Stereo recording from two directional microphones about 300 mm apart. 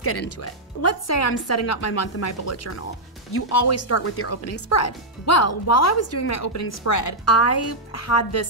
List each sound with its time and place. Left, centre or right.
0.4 s speech: left